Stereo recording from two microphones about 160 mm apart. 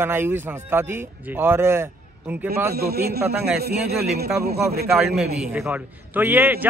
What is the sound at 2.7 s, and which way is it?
A man's voice, 75° right (ahead or behind).